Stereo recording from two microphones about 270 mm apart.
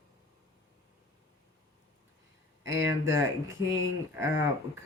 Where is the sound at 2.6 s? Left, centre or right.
Centre.